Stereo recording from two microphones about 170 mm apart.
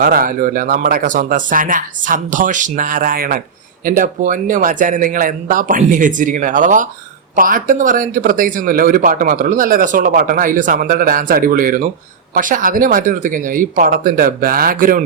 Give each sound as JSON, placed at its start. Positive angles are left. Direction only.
{"t": 0.0, "sound": "speech", "side_deg": -55}